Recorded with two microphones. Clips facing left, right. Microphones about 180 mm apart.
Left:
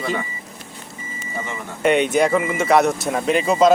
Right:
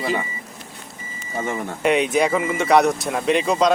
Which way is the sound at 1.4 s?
50° right (ahead or behind).